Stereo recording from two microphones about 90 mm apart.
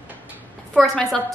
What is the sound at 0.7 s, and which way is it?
Speech, 5° left (ahead or behind).